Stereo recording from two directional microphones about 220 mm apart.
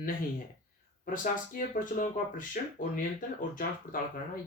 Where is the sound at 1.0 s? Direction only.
40° left (ahead or behind).